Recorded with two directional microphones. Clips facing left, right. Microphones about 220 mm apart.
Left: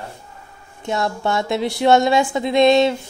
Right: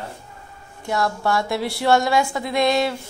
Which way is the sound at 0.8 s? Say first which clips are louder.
Left 1 dB; 20° left (ahead or behind).